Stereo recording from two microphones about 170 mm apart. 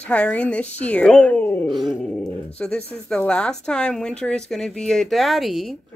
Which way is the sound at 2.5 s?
5° left (ahead or behind).